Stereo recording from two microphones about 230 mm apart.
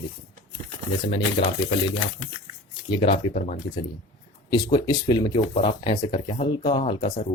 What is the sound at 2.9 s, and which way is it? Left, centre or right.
Speech, left.